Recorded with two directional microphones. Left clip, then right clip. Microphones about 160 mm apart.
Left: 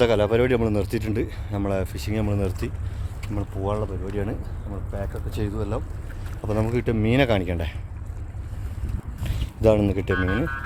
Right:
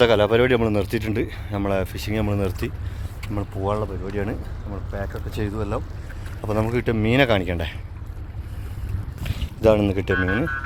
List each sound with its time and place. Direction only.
0.0 s speech: centre (ahead or behind); by 5.8 s 20° right (ahead or behind)
6.4 s a man's voice: 5° left (ahead or behind)
9.2 s boat: 15° left (ahead or behind)